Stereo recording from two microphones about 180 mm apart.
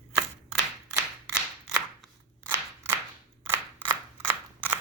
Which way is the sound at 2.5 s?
10° right (ahead or behind).